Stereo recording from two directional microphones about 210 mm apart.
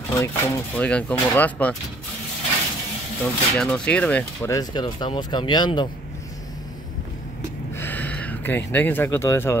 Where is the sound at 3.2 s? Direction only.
5° left (ahead or behind).